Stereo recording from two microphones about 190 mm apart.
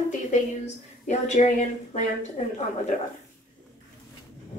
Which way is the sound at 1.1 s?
40° left (ahead or behind).